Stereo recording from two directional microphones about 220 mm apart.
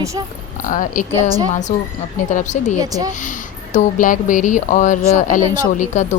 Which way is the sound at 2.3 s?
35° left (ahead or behind).